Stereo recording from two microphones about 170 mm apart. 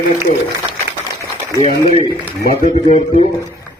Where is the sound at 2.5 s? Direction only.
45° left (ahead or behind).